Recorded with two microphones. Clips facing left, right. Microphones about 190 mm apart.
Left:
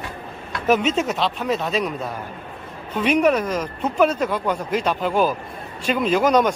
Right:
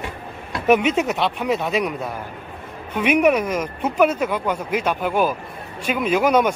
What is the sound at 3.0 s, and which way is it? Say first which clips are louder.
Speech: right 1 dB; 10° right (ahead or behind).